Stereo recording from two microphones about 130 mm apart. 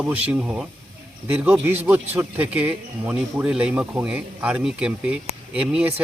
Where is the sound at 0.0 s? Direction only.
10° right (ahead or behind).